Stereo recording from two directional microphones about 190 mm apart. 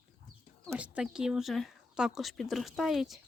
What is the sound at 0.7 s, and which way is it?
Speech, 5° right (ahead or behind).